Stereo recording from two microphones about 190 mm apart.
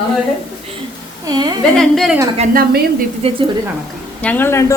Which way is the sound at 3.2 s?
30° right (ahead or behind).